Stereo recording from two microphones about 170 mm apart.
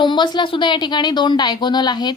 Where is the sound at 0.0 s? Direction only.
25° left (ahead or behind).